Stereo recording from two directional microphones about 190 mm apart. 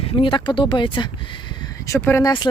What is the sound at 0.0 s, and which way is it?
Speech, 30° left (ahead or behind).